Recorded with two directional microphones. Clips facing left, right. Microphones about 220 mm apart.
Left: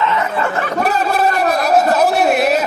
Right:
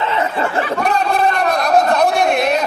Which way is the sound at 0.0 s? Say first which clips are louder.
Left 1 dB; 30° right (ahead or behind).